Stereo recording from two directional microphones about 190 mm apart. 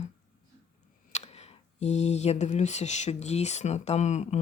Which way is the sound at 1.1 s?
35° left (ahead or behind).